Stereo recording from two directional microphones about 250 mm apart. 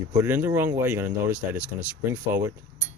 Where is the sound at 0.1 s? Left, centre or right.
Centre.